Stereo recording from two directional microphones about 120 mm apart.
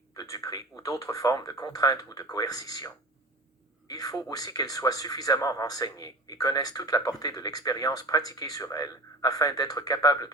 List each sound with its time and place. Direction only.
0.2 s speech: 30° left (ahead or behind)